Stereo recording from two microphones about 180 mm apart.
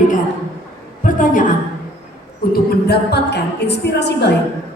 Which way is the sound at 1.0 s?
45° left (ahead or behind).